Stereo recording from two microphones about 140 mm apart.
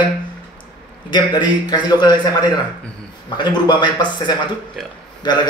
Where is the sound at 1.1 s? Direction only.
30° left (ahead or behind).